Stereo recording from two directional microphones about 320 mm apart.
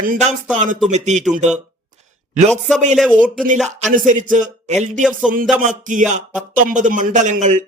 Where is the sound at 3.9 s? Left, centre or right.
Right.